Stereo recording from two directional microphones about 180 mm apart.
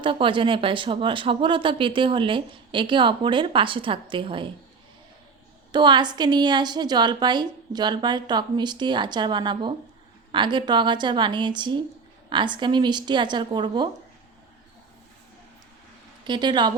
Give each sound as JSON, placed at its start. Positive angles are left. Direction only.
{"t": 0.0, "sound": "speech", "side_deg": -30}
{"t": 5.7, "sound": "speech", "side_deg": -25}
{"t": 16.2, "sound": "speech", "side_deg": -25}